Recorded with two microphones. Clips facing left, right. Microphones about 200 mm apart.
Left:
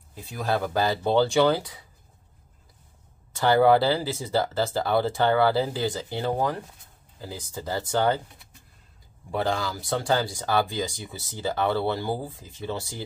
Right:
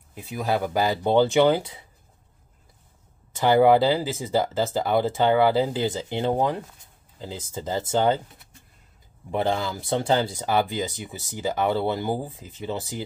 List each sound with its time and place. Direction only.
0.1 s speech: 15° right (ahead or behind)
3.3 s speech: 15° right (ahead or behind)
9.3 s speech: 20° right (ahead or behind)